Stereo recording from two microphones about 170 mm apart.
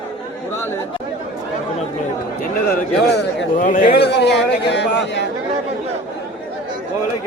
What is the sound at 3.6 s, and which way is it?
Speech, 50° left (ahead or behind).